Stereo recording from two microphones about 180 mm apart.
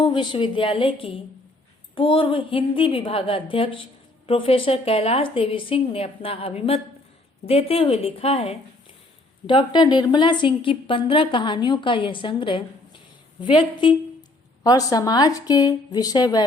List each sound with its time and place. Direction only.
0.0 s a woman's voice: 25° left (ahead or behind)